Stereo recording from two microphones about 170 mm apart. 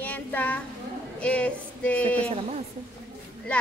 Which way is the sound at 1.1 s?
5° left (ahead or behind).